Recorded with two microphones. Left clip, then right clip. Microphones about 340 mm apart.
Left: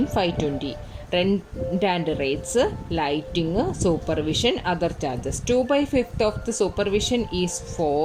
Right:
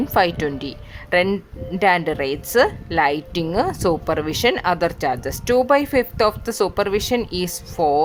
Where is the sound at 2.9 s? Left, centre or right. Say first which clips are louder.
Right 6 dB; right.